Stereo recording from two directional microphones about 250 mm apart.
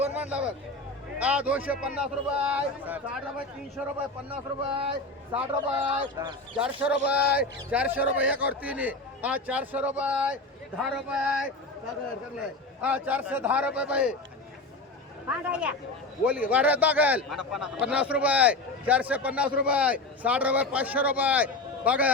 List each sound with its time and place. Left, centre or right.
0.0 s speech: centre
4.3 s speech: right
6.0 s a man's voice: centre
6.6 s speech: centre
12.8 s speech: centre
15.3 s a man's voice: centre